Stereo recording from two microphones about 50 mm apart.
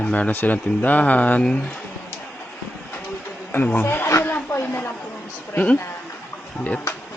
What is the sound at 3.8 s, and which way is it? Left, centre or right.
Speech, left.